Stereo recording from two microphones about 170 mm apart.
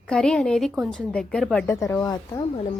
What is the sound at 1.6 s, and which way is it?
Speech, 15° left (ahead or behind).